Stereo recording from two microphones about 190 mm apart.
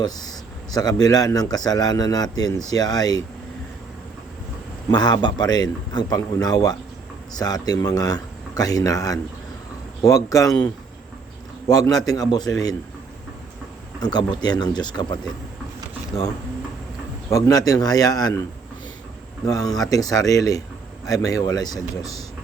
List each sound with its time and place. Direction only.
0.7 s a man's voice: 20° left (ahead or behind)
4.9 s a man's voice: 20° left (ahead or behind)
11.9 s a man's voice: 20° left (ahead or behind)
14.0 s a man's voice: 20° left (ahead or behind)
17.2 s a man's voice: 15° left (ahead or behind)
19.5 s a man's voice: 20° left (ahead or behind)